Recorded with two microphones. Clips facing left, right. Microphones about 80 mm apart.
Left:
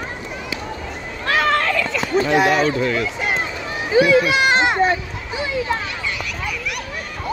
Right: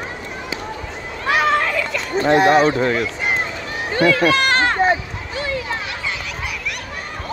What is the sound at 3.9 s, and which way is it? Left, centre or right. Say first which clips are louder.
Speech: left 2 dB; centre.